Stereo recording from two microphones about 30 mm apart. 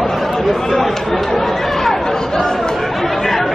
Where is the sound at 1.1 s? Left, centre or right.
Centre.